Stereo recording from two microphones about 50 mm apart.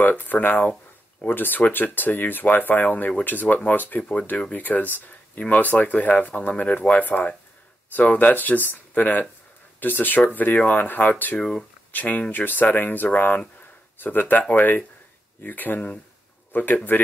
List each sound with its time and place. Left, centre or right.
0.0 s speech: left